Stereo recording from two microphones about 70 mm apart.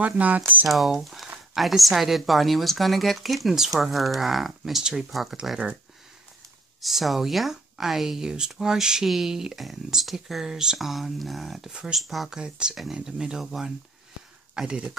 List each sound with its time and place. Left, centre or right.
0.0 s speech: right
0.7 s speech: centre
6.8 s speech: centre
12.4 s speech: centre